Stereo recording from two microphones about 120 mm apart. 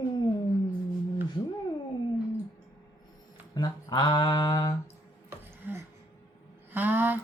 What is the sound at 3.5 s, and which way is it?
Speech, 35° left (ahead or behind).